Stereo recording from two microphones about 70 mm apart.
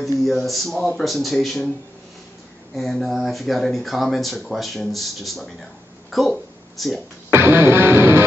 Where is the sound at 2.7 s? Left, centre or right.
Centre.